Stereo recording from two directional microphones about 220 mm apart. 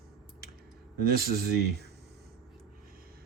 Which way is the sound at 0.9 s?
45° right (ahead or behind).